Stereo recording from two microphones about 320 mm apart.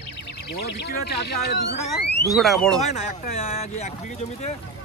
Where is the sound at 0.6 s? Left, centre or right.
Left.